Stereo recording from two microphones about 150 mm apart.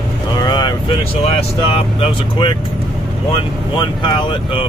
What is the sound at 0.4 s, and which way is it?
Vehicle, 30° left (ahead or behind).